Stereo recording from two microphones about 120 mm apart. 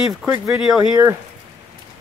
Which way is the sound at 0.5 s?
5° right (ahead or behind).